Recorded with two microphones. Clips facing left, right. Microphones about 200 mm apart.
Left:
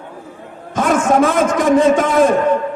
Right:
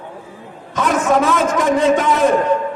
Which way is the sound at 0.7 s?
50° left (ahead or behind).